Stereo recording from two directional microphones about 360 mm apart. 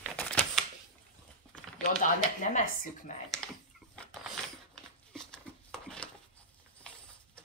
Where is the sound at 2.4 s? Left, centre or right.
Left.